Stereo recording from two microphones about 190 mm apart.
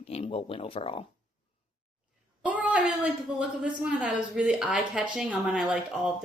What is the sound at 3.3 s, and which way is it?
Speech, 5° right (ahead or behind).